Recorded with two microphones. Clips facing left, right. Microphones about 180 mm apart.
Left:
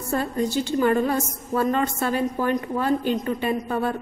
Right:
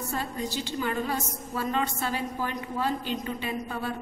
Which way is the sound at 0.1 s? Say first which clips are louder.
Left 11 dB; 50° left (ahead or behind).